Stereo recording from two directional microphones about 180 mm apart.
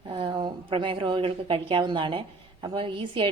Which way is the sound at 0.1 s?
25° right (ahead or behind).